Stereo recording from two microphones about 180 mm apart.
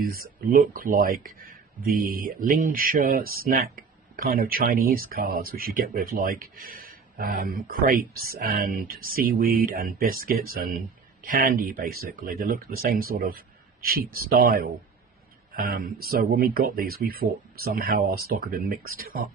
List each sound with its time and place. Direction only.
0.0 s speech: 55° right (ahead or behind)